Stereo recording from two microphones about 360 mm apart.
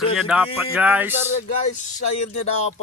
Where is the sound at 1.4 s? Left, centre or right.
Centre.